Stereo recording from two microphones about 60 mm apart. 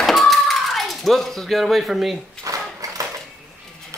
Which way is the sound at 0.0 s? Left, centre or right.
Centre.